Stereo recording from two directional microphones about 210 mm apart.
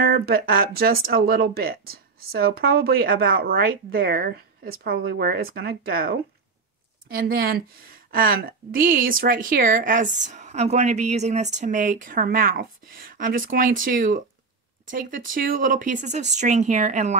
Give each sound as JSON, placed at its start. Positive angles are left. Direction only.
{"t": 0.0, "sound": "speech", "side_deg": -45}